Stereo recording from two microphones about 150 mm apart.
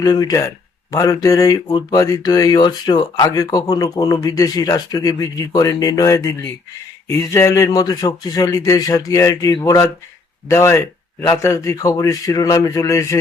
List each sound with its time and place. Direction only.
0.0 s speech: 25° left (ahead or behind)